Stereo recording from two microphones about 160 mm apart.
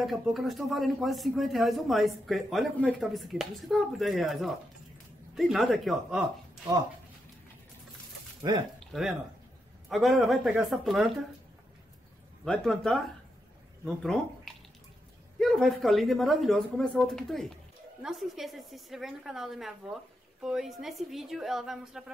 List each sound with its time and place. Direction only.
0.0 s speech: centre (ahead or behind)
8.4 s speech: 25° right (ahead or behind)
8.7 s speech: centre (ahead or behind)
12.4 s speech: centre (ahead or behind)